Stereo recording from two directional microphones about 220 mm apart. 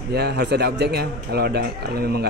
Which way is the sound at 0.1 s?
45° right (ahead or behind).